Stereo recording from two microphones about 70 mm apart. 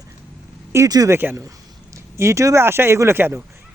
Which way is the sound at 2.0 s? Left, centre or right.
Right.